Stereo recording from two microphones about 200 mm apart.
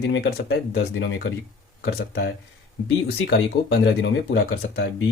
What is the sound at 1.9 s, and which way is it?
Speech, 55° left (ahead or behind).